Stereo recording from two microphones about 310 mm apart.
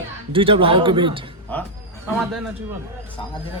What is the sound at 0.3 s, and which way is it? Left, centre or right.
Speech, centre.